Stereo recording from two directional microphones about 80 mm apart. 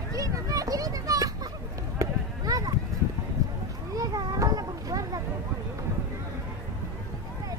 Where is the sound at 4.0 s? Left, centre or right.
Right.